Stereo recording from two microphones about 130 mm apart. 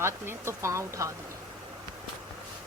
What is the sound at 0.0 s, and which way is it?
Speech, 20° right (ahead or behind).